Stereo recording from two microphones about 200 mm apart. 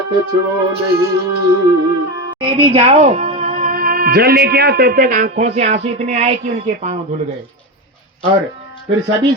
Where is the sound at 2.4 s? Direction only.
25° right (ahead or behind).